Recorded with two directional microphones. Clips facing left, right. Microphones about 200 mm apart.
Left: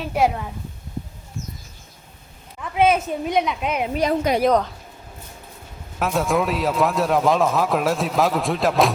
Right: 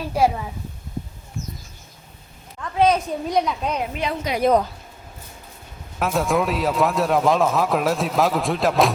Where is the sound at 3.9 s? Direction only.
45° left (ahead or behind).